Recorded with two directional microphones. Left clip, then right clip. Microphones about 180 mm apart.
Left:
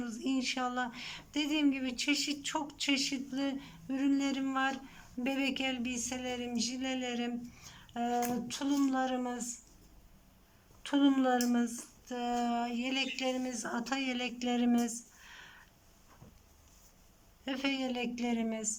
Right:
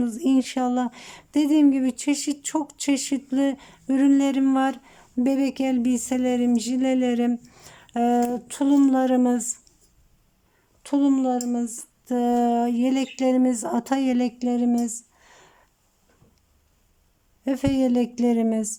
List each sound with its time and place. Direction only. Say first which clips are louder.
0.0 s speech: right 12 dB; 40° right (ahead or behind)
10.8 s speech: right 7 dB; 25° right (ahead or behind)
17.4 s speech: right 12 dB; 35° right (ahead or behind)